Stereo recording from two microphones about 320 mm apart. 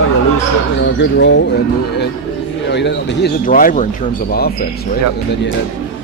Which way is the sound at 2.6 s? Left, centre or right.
Left.